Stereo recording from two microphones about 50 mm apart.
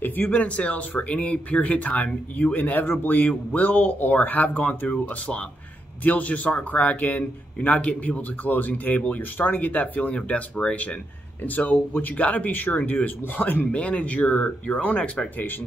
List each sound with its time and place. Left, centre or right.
0.0 s speech: left
6.0 s speech: left